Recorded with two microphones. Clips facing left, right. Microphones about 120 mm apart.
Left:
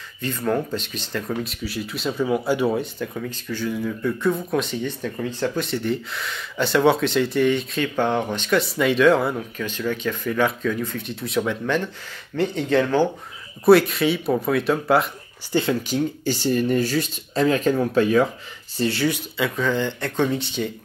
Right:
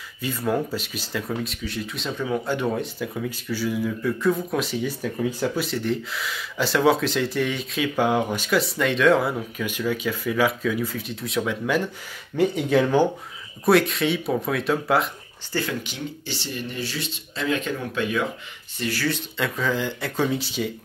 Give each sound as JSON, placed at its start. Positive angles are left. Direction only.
{"t": 0.2, "sound": "speech", "side_deg": -5}
{"t": 13.7, "sound": "speech", "side_deg": 0}
{"t": 15.5, "sound": "speech", "side_deg": 20}
{"t": 15.9, "sound": "speech", "side_deg": 45}
{"t": 18.8, "sound": "speech", "side_deg": 25}
{"t": 19.0, "sound": "speech", "side_deg": 10}
{"t": 19.4, "sound": "speech", "side_deg": 0}